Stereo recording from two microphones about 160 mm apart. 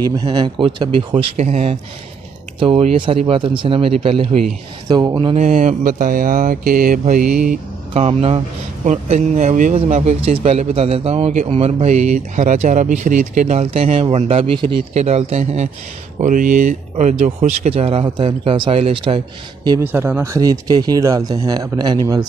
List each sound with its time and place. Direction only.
0.0 s speech: 25° right (ahead or behind)
4.8 s speech: 25° right (ahead or behind)
5.3 s speech: 45° right (ahead or behind); by 7.2 s 60° right (ahead or behind)
7.9 s speech: 40° right (ahead or behind)
19.8 s speech: 15° right (ahead or behind)